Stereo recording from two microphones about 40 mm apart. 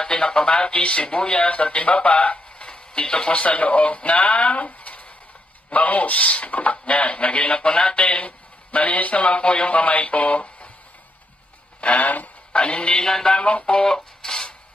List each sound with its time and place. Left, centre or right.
0.0 s speech: centre
11.8 s speech: left
12.5 s speech: left
13.7 s a sound: centre